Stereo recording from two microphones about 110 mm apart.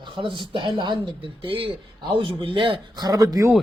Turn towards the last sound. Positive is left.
turn(degrees=-35)  # may be behind; listen again after turning